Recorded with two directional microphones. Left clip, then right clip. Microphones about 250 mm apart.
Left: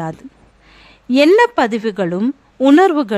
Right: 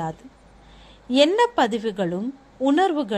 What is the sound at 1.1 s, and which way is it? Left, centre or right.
A woman's voice, left.